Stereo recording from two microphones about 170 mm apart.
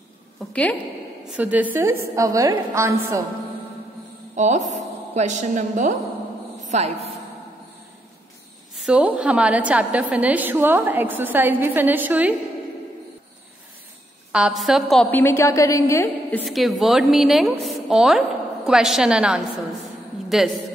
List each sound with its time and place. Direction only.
0.5 s a woman's voice: 5° left (ahead or behind)
1.3 s a woman's voice: 10° right (ahead or behind)
4.4 s a woman's voice: 45° right (ahead or behind)
8.7 s a woman's voice: 5° right (ahead or behind)
14.3 s a woman's voice: 5° right (ahead or behind); by 16.4 s 15° left (ahead or behind)
16.4 s a woman's voice: centre (ahead or behind)